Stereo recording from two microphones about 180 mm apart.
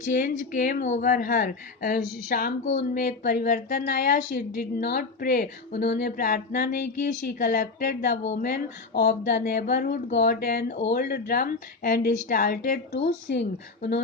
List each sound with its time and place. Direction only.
0.0 s speech: 50° left (ahead or behind)
8.2 s speech: 40° left (ahead or behind)
8.4 s a woman's voice: 55° left (ahead or behind)
13.2 s speech: 75° left (ahead or behind)